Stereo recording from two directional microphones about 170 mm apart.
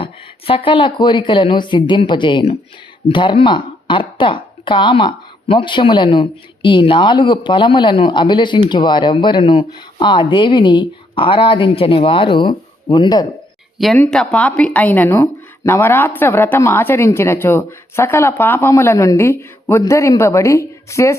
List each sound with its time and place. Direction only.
0.0 s speech: 30° left (ahead or behind)
13.7 s speech: centre (ahead or behind); by 21.2 s 15° left (ahead or behind)